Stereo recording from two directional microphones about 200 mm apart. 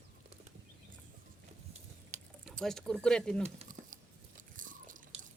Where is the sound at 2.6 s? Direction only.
5° left (ahead or behind).